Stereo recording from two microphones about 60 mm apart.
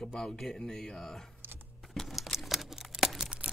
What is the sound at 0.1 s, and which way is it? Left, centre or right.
Speech, centre.